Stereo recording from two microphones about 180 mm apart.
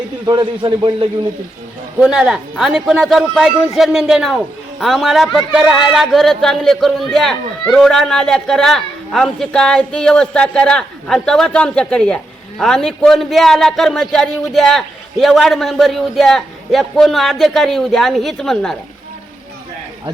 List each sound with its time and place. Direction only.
0.3 s a man's voice: 25° right (ahead or behind)
2.0 s a man's voice: 5° right (ahead or behind)